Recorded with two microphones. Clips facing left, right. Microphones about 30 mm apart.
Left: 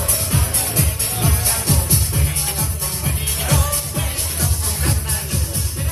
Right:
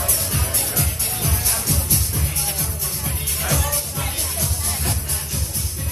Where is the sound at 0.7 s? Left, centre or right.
Left.